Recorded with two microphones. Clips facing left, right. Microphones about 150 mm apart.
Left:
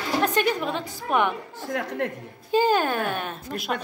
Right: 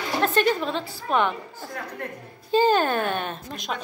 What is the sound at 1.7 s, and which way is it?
Speech, 90° left.